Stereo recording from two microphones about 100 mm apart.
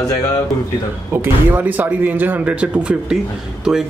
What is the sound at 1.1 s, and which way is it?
Speech, 20° right (ahead or behind).